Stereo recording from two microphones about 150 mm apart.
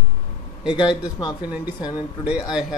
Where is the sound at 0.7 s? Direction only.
30° left (ahead or behind).